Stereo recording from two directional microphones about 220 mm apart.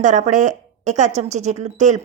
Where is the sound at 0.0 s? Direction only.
35° right (ahead or behind).